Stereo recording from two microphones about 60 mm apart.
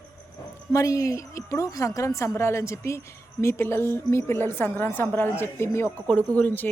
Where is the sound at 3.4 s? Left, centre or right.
Left.